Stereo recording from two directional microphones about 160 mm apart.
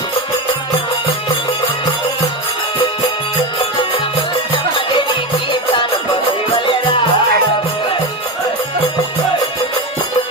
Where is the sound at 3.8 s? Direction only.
30° left (ahead or behind).